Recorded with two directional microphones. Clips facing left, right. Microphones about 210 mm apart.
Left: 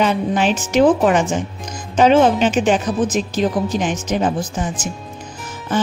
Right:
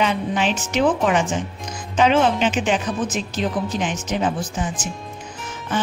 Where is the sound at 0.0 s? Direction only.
45° left (ahead or behind).